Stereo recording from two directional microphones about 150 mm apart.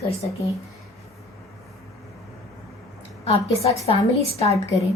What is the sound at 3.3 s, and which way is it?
Speech, 45° left (ahead or behind).